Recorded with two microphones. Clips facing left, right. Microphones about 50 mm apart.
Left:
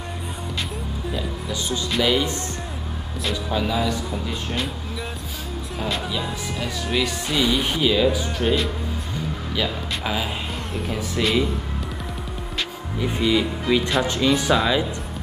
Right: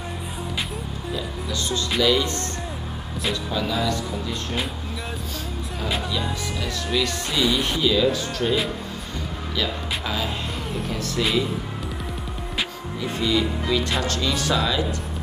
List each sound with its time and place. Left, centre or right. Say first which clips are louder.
1.1 s music: right 1 dB; centre
2.0 s speech: even; centre
2.2 s speech: even; centre
6.0 s speech: even; centre
9.6 s speech: even; centre
10.5 s speech: even; centre
11.2 s speech: left 2 dB; centre
13.0 s speech: left 2 dB; centre